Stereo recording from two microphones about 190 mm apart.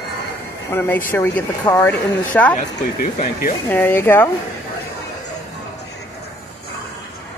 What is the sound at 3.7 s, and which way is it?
Speech, 10° left (ahead or behind).